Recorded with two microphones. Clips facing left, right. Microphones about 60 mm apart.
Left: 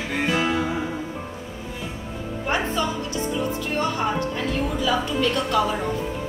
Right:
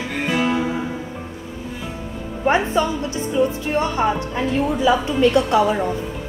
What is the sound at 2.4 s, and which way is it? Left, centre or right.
Music, right.